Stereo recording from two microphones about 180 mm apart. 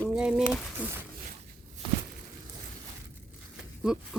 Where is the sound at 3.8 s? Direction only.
5° right (ahead or behind).